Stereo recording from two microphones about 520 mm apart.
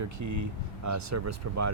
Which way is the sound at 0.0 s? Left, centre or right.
Right.